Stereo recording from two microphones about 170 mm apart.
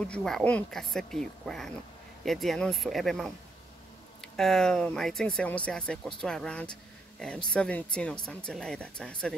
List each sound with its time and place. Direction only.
0.0 s speech: 5° left (ahead or behind)